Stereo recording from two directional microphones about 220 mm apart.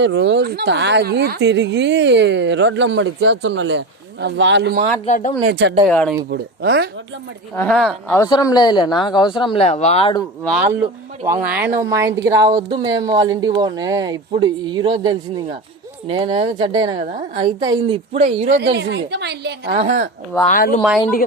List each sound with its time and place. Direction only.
0.0 s speech: 55° right (ahead or behind)
5.0 s speech: 35° left (ahead or behind)
5.5 s speech: 50° right (ahead or behind)
5.9 s speech: 5° left (ahead or behind)
6.3 s speech: 50° right (ahead or behind)
7.5 s speech: 5° left (ahead or behind)
8.2 s speech: 15° left (ahead or behind)
11.3 s speech: 10° right (ahead or behind); by 18.5 s 25° right (ahead or behind)
18.5 s speech: 50° right (ahead or behind)
19.7 s speech: 25° right (ahead or behind)
20.5 s speech: 40° left (ahead or behind)